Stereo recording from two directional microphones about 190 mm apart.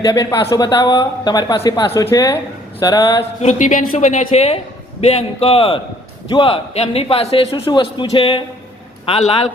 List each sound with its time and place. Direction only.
0.0 s a man's voice: 20° left (ahead or behind)
3.4 s a man's voice: 40° left (ahead or behind)